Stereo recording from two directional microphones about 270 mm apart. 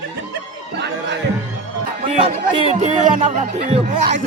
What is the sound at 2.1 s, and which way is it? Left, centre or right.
Speech, right.